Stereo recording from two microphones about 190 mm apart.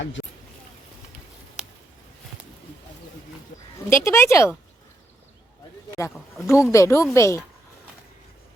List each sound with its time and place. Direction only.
3.8 s speech: 15° left (ahead or behind)
6.5 s speech: 15° left (ahead or behind)